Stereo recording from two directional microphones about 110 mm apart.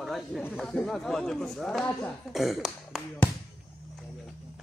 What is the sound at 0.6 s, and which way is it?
Speech, 5° left (ahead or behind).